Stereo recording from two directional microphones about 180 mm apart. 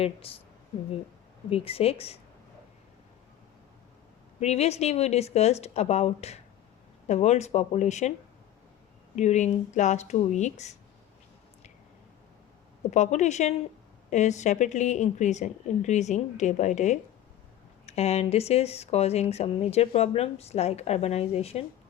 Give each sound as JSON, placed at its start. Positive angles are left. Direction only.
{"t": 0.0, "sound": "speech", "side_deg": 30}
{"t": 1.5, "sound": "speech", "side_deg": 35}
{"t": 4.4, "sound": "speech", "side_deg": 35}
{"t": 9.1, "sound": "speech", "side_deg": 40}
{"t": 12.9, "sound": "speech", "side_deg": 40}